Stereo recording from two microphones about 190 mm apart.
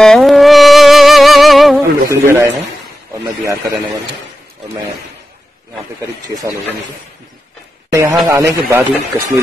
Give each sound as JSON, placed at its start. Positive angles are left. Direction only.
{"t": 0.0, "sound": "music", "side_deg": 0}
{"t": 2.0, "sound": "speech", "side_deg": -15}
{"t": 5.9, "sound": "speech", "side_deg": -20}
{"t": 7.9, "sound": "a man's voice", "side_deg": -15}